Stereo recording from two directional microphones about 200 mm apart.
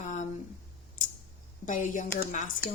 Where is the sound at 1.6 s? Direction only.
40° left (ahead or behind).